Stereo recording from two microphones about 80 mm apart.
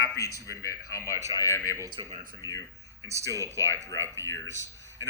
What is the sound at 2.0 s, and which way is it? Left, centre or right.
Speech, right.